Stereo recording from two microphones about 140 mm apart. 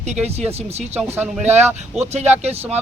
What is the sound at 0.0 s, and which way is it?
Speech, 50° right (ahead or behind).